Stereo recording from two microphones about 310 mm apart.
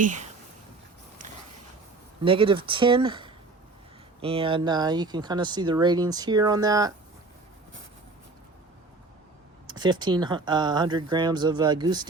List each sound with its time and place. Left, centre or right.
0.0 s speech: right
2.2 s speech: centre
9.6 s speech: centre